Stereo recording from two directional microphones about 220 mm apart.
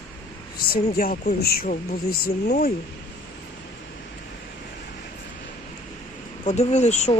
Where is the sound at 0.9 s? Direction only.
40° left (ahead or behind).